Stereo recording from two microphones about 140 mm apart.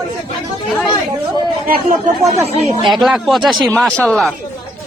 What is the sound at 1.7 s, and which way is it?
Speech, 70° right (ahead or behind).